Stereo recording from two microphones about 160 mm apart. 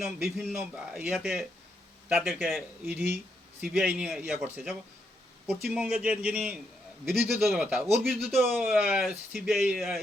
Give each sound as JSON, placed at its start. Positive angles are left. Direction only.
{"t": 0.0, "sound": "a man's voice", "side_deg": -5}
{"t": 8.4, "sound": "a man's voice", "side_deg": -10}